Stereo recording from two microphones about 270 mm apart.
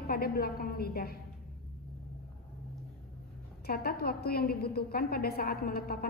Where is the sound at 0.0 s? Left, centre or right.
Left.